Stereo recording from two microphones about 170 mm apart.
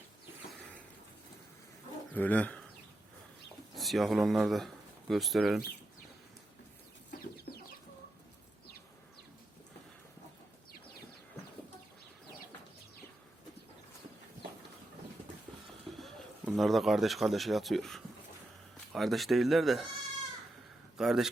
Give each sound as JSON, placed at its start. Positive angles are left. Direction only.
{"t": 2.1, "sound": "speech", "side_deg": 10}
{"t": 3.8, "sound": "speech", "side_deg": 0}
{"t": 7.5, "sound": "chicken", "side_deg": 70}
{"t": 16.0, "sound": "a sound", "side_deg": 0}
{"t": 18.9, "sound": "speech", "side_deg": 0}
{"t": 21.0, "sound": "speech", "side_deg": 0}